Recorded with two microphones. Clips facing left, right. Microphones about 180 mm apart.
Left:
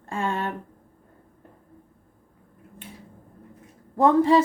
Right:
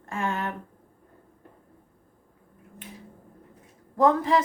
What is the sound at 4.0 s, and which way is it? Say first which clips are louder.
Speech: left 4 dB; 30° left (ahead or behind).